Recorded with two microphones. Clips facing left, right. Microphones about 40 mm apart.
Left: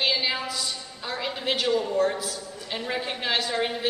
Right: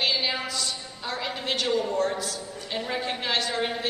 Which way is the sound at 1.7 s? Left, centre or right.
Centre.